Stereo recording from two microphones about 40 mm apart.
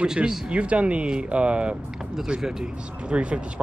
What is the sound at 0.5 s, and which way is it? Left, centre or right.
Speech, right.